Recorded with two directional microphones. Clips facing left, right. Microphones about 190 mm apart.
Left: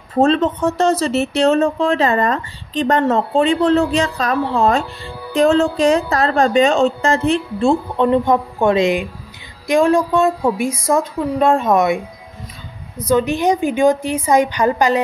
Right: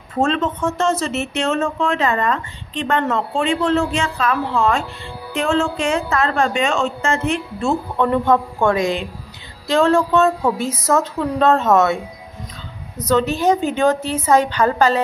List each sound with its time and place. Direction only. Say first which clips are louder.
0.1 s a woman's voice: left 5 dB; 35° left (ahead or behind); by 15.0 s 15° left (ahead or behind)